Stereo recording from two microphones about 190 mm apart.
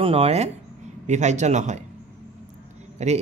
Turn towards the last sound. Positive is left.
turn(degrees=-35)  # may be behind; listen again after turning